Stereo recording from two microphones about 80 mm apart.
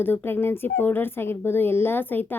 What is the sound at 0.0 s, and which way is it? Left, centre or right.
Speech, left.